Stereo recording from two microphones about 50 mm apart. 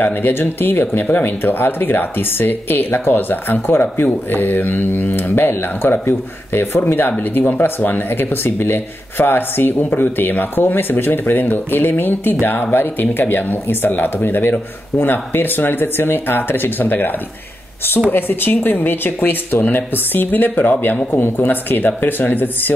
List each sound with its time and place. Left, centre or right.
0.0 s speech: left